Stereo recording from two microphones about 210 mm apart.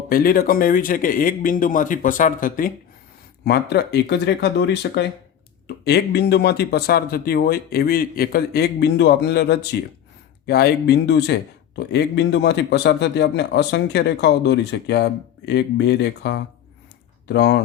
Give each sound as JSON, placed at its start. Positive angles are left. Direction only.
{"t": 0.1, "sound": "a man's voice", "side_deg": 45}